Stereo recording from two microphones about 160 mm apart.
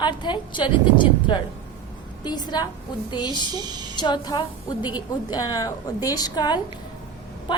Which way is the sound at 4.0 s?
30° left (ahead or behind).